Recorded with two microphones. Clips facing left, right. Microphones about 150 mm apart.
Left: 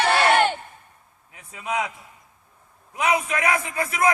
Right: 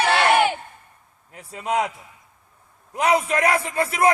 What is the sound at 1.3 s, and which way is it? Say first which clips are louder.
Speech: right 4 dB; 35° right (ahead or behind).